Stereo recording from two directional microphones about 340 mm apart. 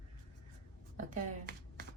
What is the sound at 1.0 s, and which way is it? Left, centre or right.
Speech, right.